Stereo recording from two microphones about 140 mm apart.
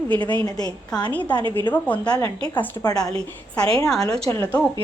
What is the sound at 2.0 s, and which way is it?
Speech, 30° left (ahead or behind).